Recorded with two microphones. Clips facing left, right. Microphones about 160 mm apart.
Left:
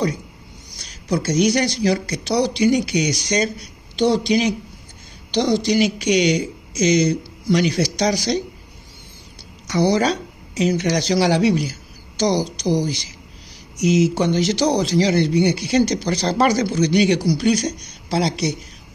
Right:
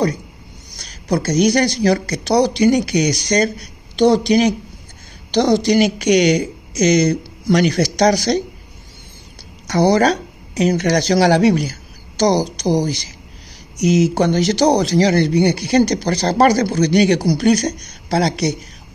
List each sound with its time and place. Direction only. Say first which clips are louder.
1.0 s speech: right 3 dB; 40° right (ahead or behind)
6.1 s speech: right 4 dB; 60° right (ahead or behind); by 8.3 s 45° right (ahead or behind)
9.7 s speech: right 4 dB; 45° right (ahead or behind)